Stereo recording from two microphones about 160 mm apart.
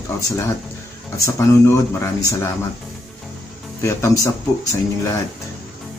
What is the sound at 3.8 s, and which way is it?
Speech, 20° left (ahead or behind).